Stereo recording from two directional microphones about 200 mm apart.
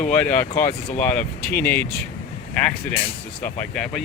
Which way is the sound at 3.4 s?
10° left (ahead or behind).